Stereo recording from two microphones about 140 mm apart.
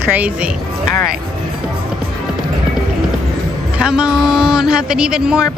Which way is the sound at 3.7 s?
5° right (ahead or behind).